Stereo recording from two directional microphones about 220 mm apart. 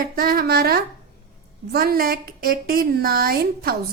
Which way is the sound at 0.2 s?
45° right (ahead or behind).